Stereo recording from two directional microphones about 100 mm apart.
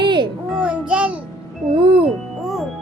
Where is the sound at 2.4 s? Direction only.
Centre (ahead or behind).